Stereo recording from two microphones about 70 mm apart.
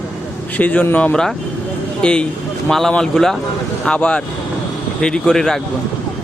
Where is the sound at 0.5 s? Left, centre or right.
Left.